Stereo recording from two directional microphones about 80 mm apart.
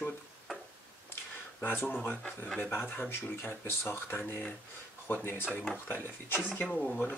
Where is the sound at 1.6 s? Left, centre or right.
Left.